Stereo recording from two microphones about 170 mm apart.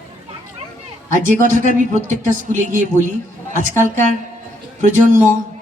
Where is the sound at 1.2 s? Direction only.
50° right (ahead or behind).